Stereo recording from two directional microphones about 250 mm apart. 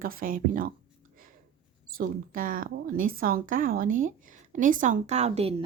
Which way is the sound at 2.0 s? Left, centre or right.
Right.